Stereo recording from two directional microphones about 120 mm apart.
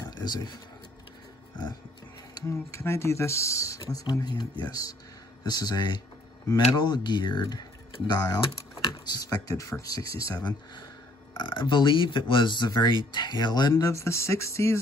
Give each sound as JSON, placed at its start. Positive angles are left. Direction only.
{"t": 0.0, "sound": "a sound", "side_deg": 35}
{"t": 2.4, "sound": "speech", "side_deg": 25}
{"t": 11.3, "sound": "speech", "side_deg": 40}